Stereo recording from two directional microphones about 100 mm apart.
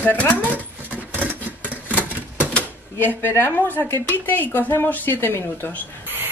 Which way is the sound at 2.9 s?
20° left (ahead or behind).